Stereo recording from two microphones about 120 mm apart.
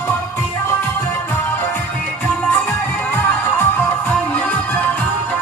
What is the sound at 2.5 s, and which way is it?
Music, 15° left (ahead or behind).